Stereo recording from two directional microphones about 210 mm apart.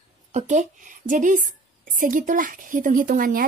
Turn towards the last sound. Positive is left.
turn(degrees=-45)  # may be behind; listen again after turning